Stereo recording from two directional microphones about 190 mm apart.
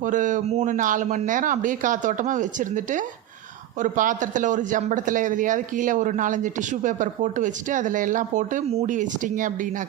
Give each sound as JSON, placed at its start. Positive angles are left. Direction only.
{"t": 0.0, "sound": "speech", "side_deg": -40}